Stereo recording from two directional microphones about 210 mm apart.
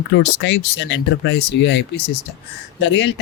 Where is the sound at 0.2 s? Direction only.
55° left (ahead or behind).